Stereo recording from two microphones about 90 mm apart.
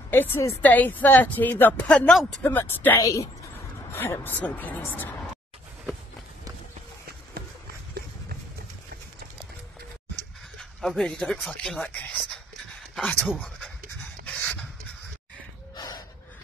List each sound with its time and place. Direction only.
0.1 s a woman's voice: 25° left (ahead or behind)
3.0 s a woman's voice: 40° left (ahead or behind)
4.2 s a woman's voice: 20° left (ahead or behind)
10.6 s speech: 5° left (ahead or behind)
11.9 s speech: 15° left (ahead or behind)
12.9 s speech: 5° left (ahead or behind)
14.2 s pant: 15° left (ahead or behind)
15.7 s gasp: 50° left (ahead or behind)